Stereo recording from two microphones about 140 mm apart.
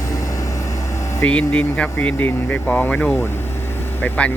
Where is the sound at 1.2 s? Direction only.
10° left (ahead or behind).